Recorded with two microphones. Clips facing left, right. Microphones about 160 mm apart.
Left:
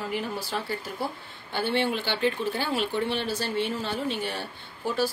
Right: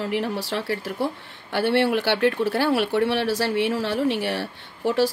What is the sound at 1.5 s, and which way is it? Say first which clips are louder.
Speech: right 6 dB; 75° right (ahead or behind).